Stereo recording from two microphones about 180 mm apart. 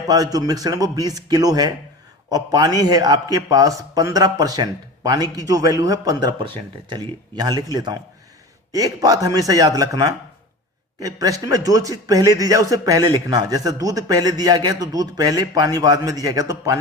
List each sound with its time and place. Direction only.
0.1 s a man's voice: 20° right (ahead or behind)